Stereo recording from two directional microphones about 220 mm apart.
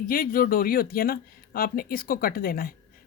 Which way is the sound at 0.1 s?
40° left (ahead or behind).